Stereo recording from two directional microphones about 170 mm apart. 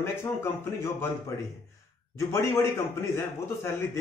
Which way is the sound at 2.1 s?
15° left (ahead or behind).